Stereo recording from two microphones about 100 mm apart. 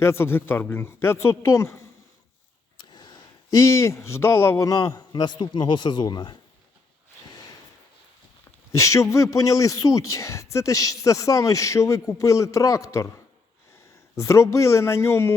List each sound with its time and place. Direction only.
0.0 s a man's voice: 25° left (ahead or behind)
2.9 s speech: 45° left (ahead or behind)
8.7 s a man's voice: 30° left (ahead or behind)